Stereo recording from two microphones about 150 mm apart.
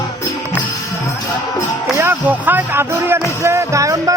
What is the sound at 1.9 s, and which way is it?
Music, 15° right (ahead or behind).